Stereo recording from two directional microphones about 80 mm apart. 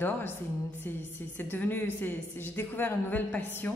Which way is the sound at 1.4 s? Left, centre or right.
Left.